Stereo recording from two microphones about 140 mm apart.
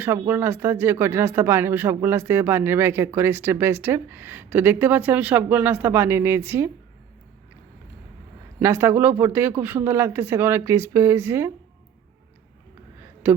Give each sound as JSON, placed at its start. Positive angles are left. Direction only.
{"t": 0.0, "sound": "speech", "side_deg": -15}
{"t": 8.5, "sound": "speech", "side_deg": -20}